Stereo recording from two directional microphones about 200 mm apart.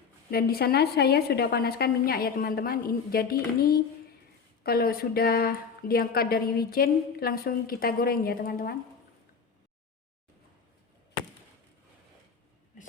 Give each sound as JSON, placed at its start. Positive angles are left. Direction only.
{"t": 0.3, "sound": "speech", "side_deg": 50}